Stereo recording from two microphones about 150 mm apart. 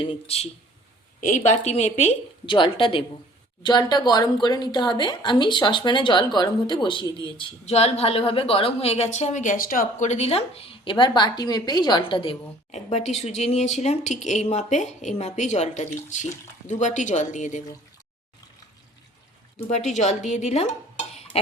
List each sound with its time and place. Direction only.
0.0 s a woman's voice: 40° left (ahead or behind)
7.6 s speech: 45° left (ahead or behind); by 10.1 s 70° left (ahead or behind)
10.1 s a woman's voice: 45° left (ahead or behind)
12.7 s speech: 45° left (ahead or behind)
19.5 s dishes: 45° left (ahead or behind)